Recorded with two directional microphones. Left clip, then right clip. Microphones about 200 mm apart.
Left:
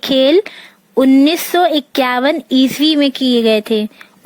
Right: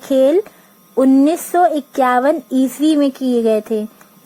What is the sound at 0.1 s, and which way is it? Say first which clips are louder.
Speech: left 1 dB; 25° left (ahead or behind).